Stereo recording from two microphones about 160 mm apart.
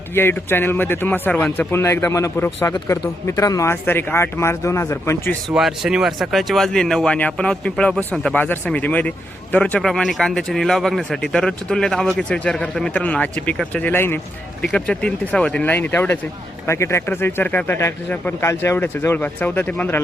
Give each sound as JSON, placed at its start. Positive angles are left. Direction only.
{"t": 0.1, "sound": "speech", "side_deg": 15}
{"t": 5.5, "sound": "speech", "side_deg": 0}